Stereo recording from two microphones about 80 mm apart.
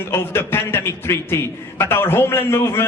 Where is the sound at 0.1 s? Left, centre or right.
Left.